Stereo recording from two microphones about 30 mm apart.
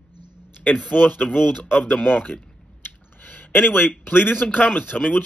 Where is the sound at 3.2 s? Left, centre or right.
Left.